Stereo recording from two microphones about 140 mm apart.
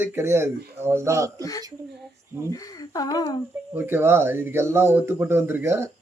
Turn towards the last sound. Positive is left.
turn(degrees=-20)  # may be behind; listen again after turning